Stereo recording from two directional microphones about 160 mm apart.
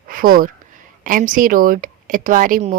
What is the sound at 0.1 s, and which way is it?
Speech, 60° right (ahead or behind).